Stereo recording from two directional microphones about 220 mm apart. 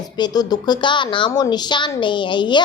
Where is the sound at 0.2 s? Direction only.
20° left (ahead or behind).